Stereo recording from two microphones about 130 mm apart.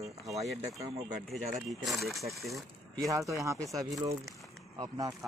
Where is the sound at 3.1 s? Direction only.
25° right (ahead or behind).